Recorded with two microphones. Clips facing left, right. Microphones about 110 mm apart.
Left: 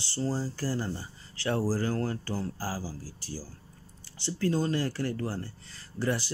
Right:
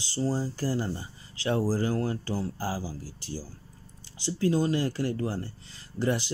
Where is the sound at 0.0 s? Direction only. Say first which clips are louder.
Right 2 dB; 15° right (ahead or behind).